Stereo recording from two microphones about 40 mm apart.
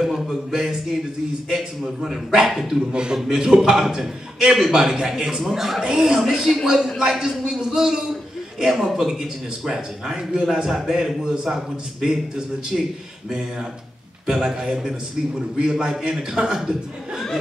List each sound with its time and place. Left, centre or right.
0.0 s a man's voice: centre